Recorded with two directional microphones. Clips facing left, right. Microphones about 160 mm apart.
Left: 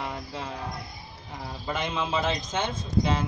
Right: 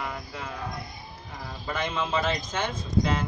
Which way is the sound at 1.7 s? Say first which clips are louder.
Even; 15° left (ahead or behind).